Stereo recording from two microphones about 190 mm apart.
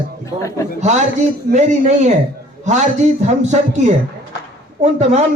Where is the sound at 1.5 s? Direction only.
40° right (ahead or behind).